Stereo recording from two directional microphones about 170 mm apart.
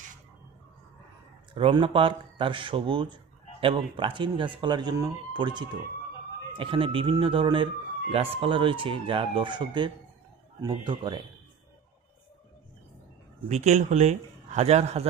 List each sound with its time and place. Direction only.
1.5 s speech: 30° right (ahead or behind)
13.5 s a man's voice: 40° right (ahead or behind)